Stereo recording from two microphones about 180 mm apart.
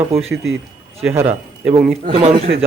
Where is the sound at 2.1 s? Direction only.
35° right (ahead or behind).